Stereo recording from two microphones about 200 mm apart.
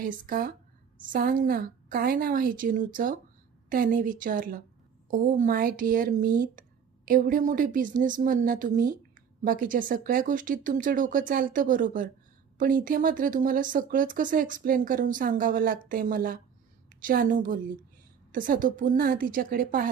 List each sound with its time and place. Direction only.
0.0 s a woman's voice: 45° right (ahead or behind)